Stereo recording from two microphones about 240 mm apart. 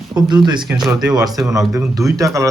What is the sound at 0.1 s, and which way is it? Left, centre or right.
Speech, centre.